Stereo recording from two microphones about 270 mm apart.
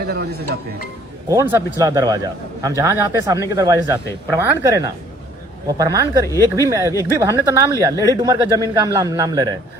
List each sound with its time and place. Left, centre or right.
0.1 s speech: right
1.3 s a man's voice: centre